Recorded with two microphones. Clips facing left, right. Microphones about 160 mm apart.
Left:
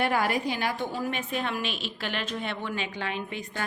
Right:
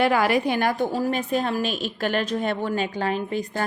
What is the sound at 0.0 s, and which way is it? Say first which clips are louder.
A woman's voice: right 6 dB; 90° right.